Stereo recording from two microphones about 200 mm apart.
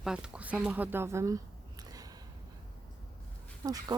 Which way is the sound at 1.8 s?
20° right (ahead or behind).